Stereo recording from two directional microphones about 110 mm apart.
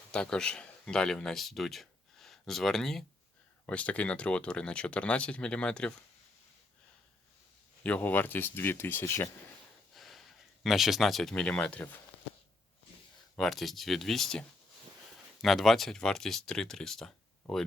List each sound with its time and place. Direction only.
0.1 s speech: 10° left (ahead or behind)
7.9 s speech: 15° left (ahead or behind)
9.9 s speech: centre (ahead or behind)
13.3 s speech: 5° left (ahead or behind)